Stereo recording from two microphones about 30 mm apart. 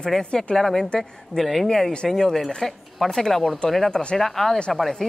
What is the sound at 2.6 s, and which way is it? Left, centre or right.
Speech, centre.